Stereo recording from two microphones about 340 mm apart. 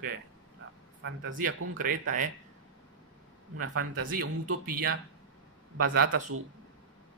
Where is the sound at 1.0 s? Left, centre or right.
Right.